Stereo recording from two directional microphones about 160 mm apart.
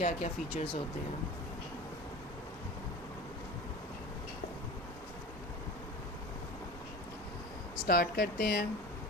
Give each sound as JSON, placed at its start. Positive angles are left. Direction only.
{"t": 0.0, "sound": "speech", "side_deg": 40}
{"t": 7.9, "sound": "speech", "side_deg": 70}